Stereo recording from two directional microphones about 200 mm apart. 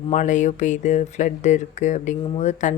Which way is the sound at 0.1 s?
40° left (ahead or behind).